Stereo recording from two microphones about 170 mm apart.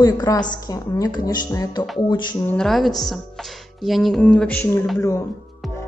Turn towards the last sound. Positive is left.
turn(degrees=15)  # may be behind; listen again after turning